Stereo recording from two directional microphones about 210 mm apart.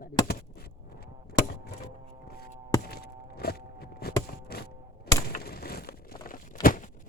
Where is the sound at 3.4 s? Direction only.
45° left (ahead or behind).